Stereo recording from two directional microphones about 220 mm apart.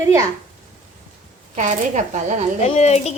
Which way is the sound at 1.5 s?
35° right (ahead or behind).